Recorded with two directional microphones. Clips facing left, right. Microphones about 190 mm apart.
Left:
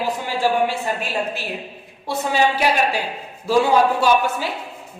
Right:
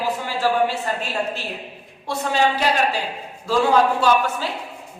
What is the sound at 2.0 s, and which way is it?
Speech, 10° left (ahead or behind).